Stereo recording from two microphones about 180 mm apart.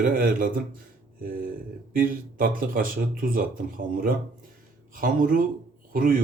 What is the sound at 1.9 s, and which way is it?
Speech, 50° right (ahead or behind).